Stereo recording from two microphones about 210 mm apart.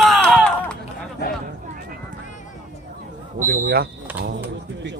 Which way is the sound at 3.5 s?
45° right (ahead or behind).